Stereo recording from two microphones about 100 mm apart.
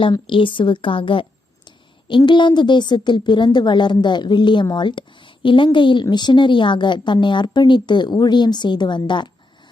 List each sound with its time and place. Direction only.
0.1 s a woman's voice: 60° left (ahead or behind)